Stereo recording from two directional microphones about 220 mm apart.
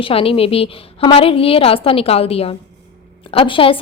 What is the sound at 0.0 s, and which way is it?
A woman's voice, 25° left (ahead or behind).